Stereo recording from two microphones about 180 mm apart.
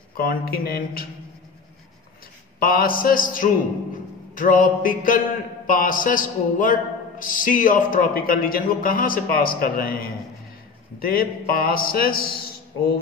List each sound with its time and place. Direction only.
0.2 s a man's voice: 55° left (ahead or behind)
2.6 s a man's voice: 55° left (ahead or behind)